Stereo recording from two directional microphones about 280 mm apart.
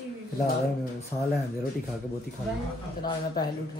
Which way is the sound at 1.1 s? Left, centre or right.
Left.